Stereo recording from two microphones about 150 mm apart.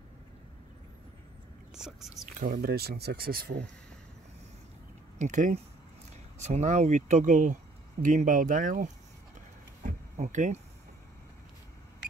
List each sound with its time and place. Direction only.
1.7 s speech: 5° right (ahead or behind)
2.2 s speech: 60° right (ahead or behind); by 3.5 s 90° right
5.2 s speech: 55° right (ahead or behind)
9.8 s a sound: 55° right (ahead or behind)